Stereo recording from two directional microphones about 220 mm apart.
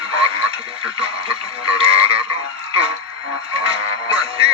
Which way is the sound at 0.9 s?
25° right (ahead or behind).